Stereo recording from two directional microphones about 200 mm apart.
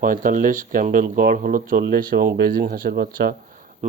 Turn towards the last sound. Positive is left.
turn(degrees=-50)  # may be behind; listen again after turning